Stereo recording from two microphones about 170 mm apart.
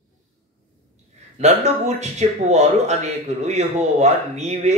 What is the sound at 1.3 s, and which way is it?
Speech, 40° right (ahead or behind).